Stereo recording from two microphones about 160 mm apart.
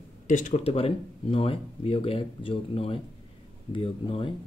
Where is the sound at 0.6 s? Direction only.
35° left (ahead or behind).